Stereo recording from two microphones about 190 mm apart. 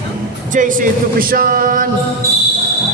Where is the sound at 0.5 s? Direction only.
45° right (ahead or behind).